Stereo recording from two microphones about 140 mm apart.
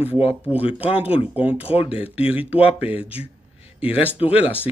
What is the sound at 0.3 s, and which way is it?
Speech, 10° right (ahead or behind).